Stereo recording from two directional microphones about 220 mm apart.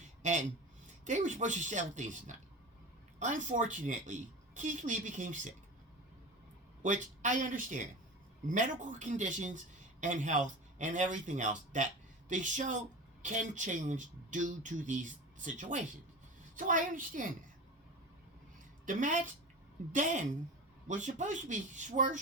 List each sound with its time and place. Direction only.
0.2 s speech: 35° right (ahead or behind)
6.8 s speech: 35° right (ahead or behind)
18.9 s speech: 35° right (ahead or behind)